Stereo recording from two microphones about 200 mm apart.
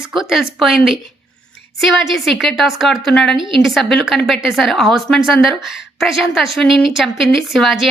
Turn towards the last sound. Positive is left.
turn(degrees=0)  # may be behind; listen again after turning